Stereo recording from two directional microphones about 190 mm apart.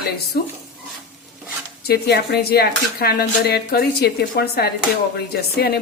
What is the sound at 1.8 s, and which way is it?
Speech, 55° left (ahead or behind).